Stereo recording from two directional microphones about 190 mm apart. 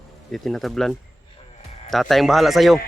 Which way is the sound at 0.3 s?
Centre (ahead or behind).